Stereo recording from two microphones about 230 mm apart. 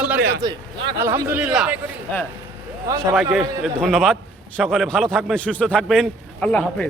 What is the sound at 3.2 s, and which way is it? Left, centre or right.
A man's voice, centre.